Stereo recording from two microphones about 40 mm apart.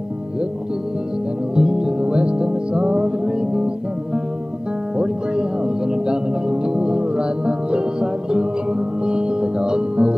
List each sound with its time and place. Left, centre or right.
1.5 s music: right